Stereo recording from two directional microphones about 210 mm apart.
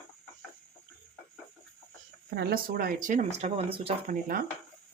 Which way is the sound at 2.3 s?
45° right (ahead or behind).